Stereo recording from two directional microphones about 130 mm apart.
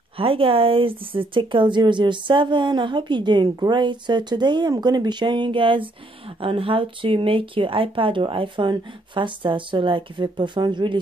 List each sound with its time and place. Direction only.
0.2 s speech: 45° right (ahead or behind)